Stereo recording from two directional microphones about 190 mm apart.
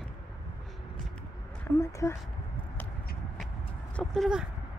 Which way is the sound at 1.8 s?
15° left (ahead or behind).